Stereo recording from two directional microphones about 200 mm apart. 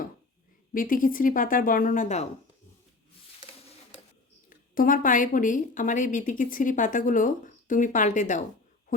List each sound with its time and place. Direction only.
0.7 s a woman's voice: 45° left (ahead or behind)
4.4 s a woman's voice: 45° left (ahead or behind)